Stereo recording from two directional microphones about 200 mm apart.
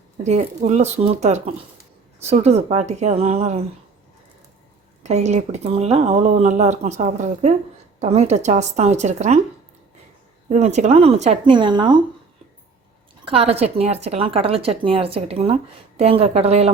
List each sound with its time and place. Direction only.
0.2 s speech: 35° right (ahead or behind)
5.0 s speech: 35° right (ahead or behind)
10.5 s speech: 35° right (ahead or behind)
13.2 s a woman's voice: 30° right (ahead or behind)